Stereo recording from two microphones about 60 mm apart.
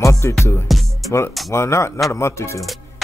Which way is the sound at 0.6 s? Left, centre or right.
Centre.